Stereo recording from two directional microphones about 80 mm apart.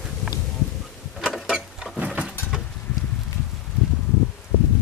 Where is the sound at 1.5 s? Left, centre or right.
Centre.